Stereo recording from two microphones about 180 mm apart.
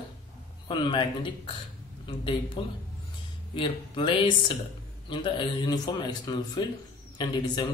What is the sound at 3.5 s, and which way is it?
Speech, 30° left (ahead or behind).